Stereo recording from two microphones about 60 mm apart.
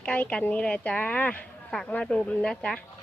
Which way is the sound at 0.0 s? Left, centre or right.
Left.